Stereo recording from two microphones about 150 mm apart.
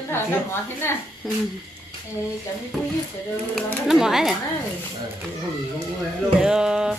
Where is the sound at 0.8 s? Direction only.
15° left (ahead or behind).